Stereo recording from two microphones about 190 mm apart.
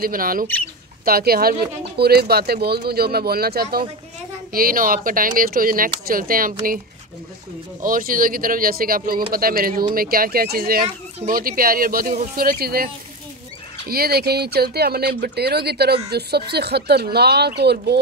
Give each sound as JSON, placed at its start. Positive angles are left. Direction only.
{"t": 0.0, "sound": "speech", "side_deg": -50}
{"t": 7.8, "sound": "speech", "side_deg": -45}